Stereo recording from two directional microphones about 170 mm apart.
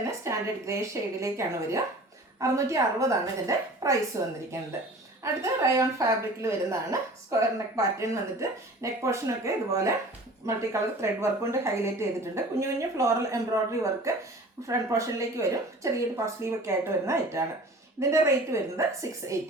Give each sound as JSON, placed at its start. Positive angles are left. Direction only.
{"t": 0.0, "sound": "a woman's voice", "side_deg": -15}